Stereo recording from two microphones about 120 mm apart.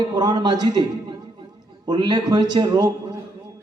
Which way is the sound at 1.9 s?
40° right (ahead or behind).